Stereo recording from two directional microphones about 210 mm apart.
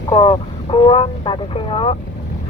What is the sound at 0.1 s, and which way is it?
Speech, 25° left (ahead or behind).